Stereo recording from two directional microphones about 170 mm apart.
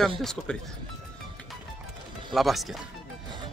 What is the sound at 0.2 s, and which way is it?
Speech, 5° left (ahead or behind).